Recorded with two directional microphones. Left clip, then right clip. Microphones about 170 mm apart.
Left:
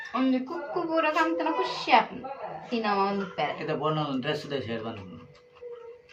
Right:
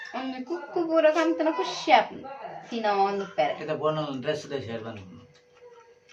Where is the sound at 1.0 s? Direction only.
15° right (ahead or behind).